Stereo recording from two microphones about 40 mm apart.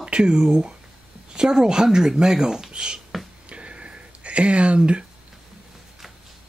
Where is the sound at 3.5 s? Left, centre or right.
Right.